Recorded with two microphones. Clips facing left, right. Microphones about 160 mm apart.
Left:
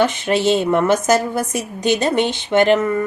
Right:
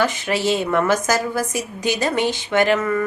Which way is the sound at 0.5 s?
25° left (ahead or behind).